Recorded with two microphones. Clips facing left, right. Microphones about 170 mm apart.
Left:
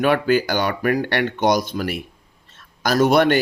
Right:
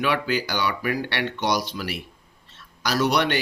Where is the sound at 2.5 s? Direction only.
50° left (ahead or behind).